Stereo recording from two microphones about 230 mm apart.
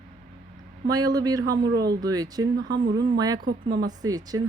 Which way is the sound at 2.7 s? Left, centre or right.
Right.